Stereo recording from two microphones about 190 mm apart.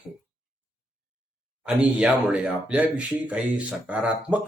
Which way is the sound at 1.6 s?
5° right (ahead or behind).